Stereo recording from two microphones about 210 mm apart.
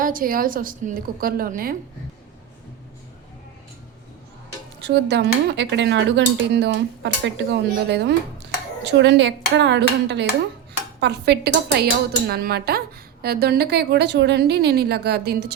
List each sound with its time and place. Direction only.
0.0 s a woman's voice: 40° right (ahead or behind)
4.8 s a woman's voice: 55° right (ahead or behind)